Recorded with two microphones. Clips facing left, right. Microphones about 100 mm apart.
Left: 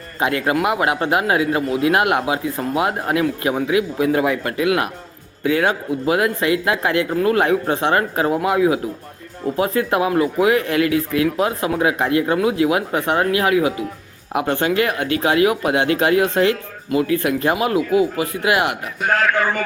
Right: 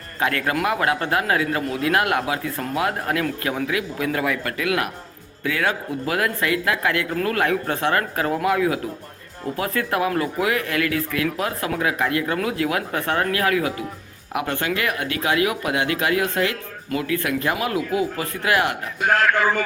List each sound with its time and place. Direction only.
0.2 s speech: 20° left (ahead or behind)
19.0 s speech: 10° right (ahead or behind)